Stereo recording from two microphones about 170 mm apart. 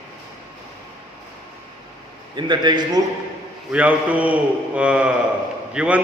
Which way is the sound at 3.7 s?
10° right (ahead or behind).